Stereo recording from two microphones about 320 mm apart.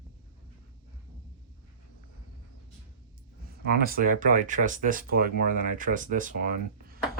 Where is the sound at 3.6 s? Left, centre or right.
Right.